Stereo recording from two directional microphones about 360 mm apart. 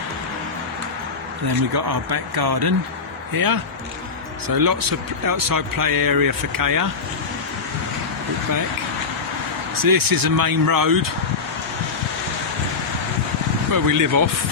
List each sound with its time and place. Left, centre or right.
1.5 s speech: right
3.3 s speech: right
9.7 s speech: right
13.7 s speech: right